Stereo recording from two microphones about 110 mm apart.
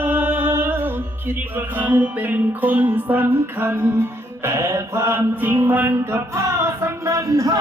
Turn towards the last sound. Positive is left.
turn(degrees=-30)  # may be behind; listen again after turning